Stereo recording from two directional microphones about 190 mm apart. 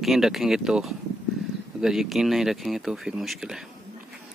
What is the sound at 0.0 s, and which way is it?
Speech, centre (ahead or behind).